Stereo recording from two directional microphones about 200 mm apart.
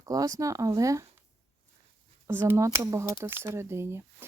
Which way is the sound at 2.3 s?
10° right (ahead or behind).